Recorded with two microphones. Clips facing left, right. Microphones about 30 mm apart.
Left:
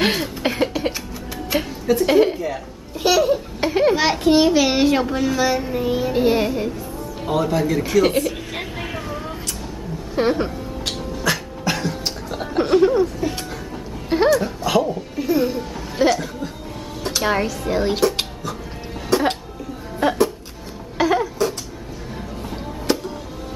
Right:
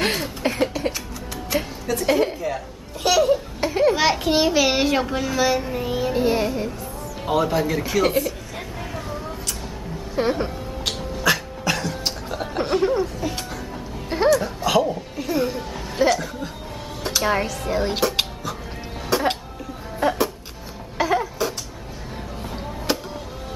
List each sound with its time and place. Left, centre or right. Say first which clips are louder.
0.4 s a sound: even; centre
1.5 s a woman's voice: left 5 dB; centre
3.6 s a sound: left 2 dB; centre
3.9 s a child's voice: left 3 dB; centre
6.1 s music: left 3 dB; centre
7.2 s a child's voice: left 1 dB; centre
10.3 s music: left 3 dB; centre
11.6 s music: left 3 dB; centre
17.0 s speech: left 1 dB; centre
17.9 s a sound: left 2 dB; centre
19.0 s music: left 3 dB; centre
22.9 s music: left 3 dB; centre